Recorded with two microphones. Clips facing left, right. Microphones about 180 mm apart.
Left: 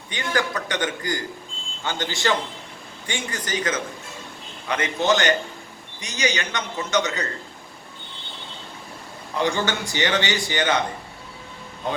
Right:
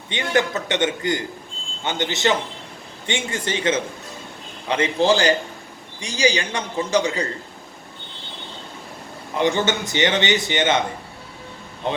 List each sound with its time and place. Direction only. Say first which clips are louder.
0.1 s a man's voice: right 4 dB; 25° right (ahead or behind)
9.3 s a man's voice: right 3 dB; 20° right (ahead or behind)